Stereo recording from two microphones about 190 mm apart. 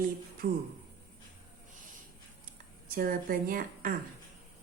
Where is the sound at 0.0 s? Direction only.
50° right (ahead or behind).